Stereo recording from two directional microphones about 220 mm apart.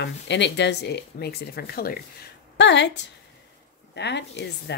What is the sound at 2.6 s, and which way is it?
Speech, 55° left (ahead or behind).